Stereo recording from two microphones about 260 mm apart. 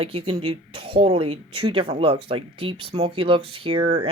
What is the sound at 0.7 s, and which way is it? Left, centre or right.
Speech, right.